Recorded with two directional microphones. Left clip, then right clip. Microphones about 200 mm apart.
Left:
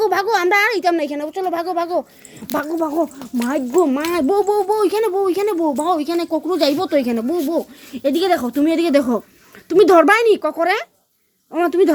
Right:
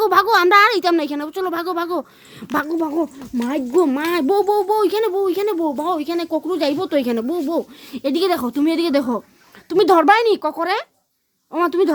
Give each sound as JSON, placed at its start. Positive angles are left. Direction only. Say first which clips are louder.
{"t": 0.0, "sound": "speech", "louder": "right 2 dB", "side_deg": -15}